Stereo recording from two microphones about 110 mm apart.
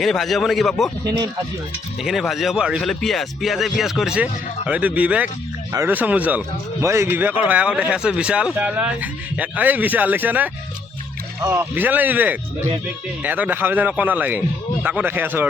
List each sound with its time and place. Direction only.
0.0 s speech: centre (ahead or behind)
2.0 s speech: centre (ahead or behind)
6.8 s speech: 25° right (ahead or behind)
11.4 s speech: 30° right (ahead or behind)
11.7 s speech: 15° right (ahead or behind)